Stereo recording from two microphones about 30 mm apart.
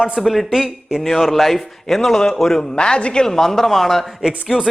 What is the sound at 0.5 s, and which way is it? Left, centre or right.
Speech, centre.